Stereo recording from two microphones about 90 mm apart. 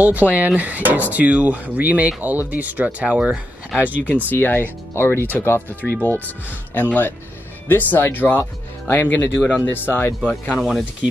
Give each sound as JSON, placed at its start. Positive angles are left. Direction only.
{"t": 0.0, "sound": "speech", "side_deg": -20}
{"t": 3.9, "sound": "speech", "side_deg": 20}